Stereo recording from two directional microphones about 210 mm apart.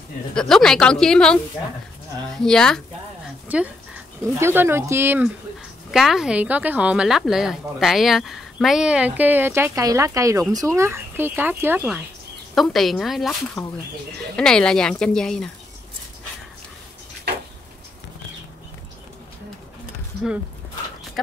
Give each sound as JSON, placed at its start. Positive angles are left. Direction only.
{"t": 0.3, "sound": "speech", "side_deg": 5}
{"t": 3.4, "sound": "speech", "side_deg": -5}